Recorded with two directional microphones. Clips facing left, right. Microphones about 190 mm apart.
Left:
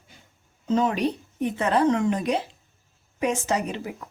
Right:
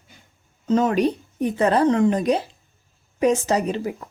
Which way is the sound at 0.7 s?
45° right (ahead or behind).